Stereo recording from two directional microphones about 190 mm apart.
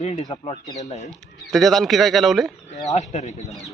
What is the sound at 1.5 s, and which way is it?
A man's voice, centre (ahead or behind).